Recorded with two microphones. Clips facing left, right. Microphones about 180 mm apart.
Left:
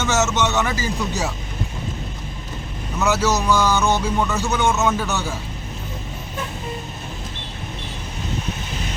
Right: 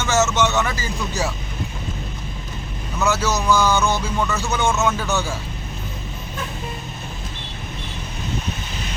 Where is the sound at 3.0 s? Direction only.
20° left (ahead or behind).